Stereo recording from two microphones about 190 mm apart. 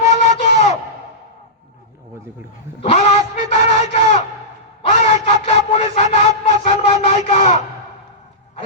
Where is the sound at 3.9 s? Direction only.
35° left (ahead or behind).